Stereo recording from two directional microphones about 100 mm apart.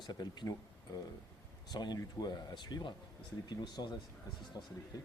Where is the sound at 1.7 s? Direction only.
45° left (ahead or behind).